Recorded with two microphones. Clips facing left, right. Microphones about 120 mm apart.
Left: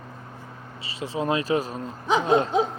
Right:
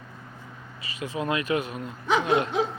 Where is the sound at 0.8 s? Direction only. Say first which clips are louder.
Left 2 dB; 30° left (ahead or behind).